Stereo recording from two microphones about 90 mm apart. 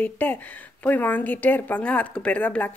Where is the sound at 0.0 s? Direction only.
20° left (ahead or behind).